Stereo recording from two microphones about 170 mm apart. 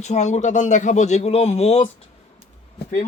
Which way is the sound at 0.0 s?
45° left (ahead or behind).